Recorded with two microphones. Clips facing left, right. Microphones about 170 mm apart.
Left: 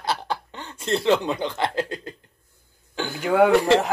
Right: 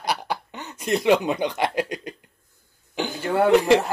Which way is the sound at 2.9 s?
15° right (ahead or behind).